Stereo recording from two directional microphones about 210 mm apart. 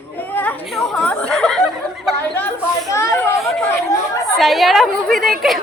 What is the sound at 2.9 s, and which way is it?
Chatter, 15° left (ahead or behind).